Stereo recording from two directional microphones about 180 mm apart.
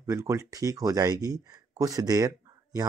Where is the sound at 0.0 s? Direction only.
15° right (ahead or behind).